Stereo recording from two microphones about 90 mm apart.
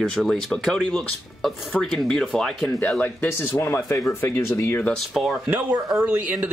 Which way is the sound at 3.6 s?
35° left (ahead or behind).